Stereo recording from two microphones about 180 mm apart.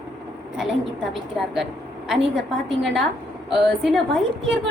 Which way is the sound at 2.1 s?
Centre (ahead or behind).